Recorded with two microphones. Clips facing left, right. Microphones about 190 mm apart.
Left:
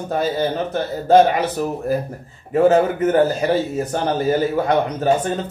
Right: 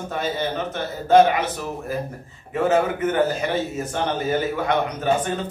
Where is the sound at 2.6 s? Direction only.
35° left (ahead or behind).